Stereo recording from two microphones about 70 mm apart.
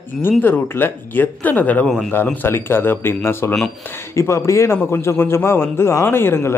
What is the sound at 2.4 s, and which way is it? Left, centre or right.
A man's voice, left.